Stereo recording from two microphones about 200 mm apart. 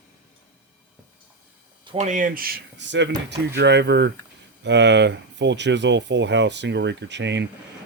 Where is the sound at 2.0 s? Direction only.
40° right (ahead or behind).